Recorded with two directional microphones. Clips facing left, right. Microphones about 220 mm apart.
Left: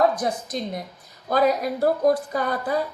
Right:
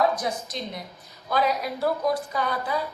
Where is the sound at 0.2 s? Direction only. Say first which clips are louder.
Left 4 dB; 50° left (ahead or behind).